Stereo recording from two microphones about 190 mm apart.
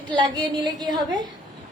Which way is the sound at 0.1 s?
20° right (ahead or behind).